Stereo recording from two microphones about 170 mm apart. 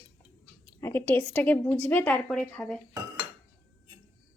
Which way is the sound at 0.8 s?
10° left (ahead or behind).